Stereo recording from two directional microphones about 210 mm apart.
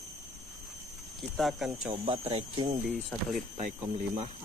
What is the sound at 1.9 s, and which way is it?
Speech, 25° right (ahead or behind).